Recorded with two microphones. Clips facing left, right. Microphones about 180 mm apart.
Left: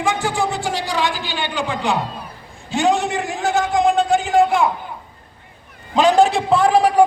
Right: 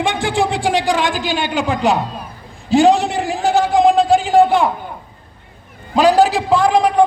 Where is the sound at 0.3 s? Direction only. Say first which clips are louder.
Right 4 dB; 90° right.